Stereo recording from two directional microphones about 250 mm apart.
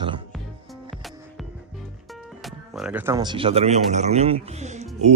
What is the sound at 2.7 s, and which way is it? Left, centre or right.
Speech, centre.